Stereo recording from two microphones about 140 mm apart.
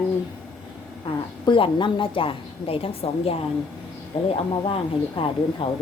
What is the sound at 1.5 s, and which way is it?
A woman's voice, 35° left (ahead or behind).